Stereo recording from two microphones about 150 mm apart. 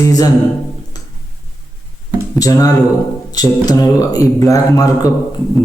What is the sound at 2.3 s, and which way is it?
Mantra, 25° left (ahead or behind).